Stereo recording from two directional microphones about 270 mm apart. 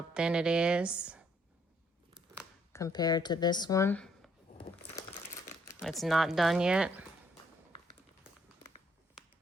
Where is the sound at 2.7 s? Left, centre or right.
Centre.